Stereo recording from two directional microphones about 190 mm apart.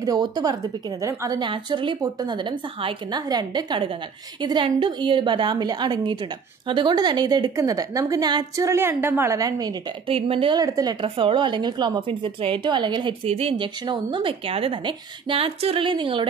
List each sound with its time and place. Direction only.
0.0 s a woman's voice: 20° right (ahead or behind)
10.0 s a woman's voice: 30° right (ahead or behind)